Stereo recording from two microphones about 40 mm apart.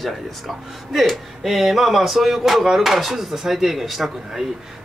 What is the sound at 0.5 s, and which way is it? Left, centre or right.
Speech, centre.